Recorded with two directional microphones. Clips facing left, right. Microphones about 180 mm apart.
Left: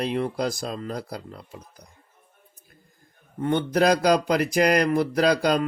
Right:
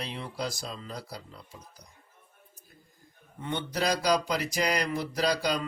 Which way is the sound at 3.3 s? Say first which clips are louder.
Left 10 dB; 50° left (ahead or behind).